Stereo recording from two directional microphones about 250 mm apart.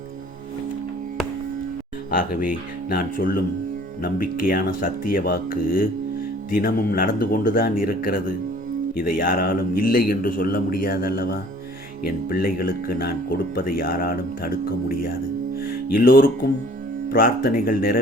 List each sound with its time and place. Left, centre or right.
2.0 s speech: left
15.6 s music: left
17.1 s speech: left